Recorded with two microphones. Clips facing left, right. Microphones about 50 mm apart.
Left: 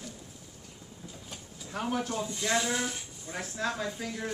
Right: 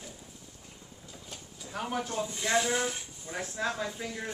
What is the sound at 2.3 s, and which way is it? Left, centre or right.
Speech, centre.